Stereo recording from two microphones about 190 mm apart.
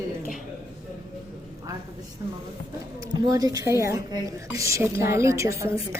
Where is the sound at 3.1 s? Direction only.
20° right (ahead or behind).